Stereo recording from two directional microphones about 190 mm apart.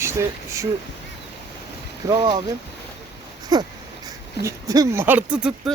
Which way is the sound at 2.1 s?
20° right (ahead or behind).